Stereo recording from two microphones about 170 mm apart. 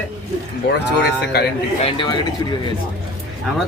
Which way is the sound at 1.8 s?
30° left (ahead or behind).